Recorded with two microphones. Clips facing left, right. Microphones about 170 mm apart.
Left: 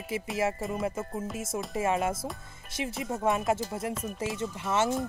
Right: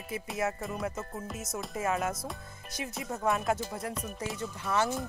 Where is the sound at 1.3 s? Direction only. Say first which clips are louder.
Left 4 dB; 25° left (ahead or behind).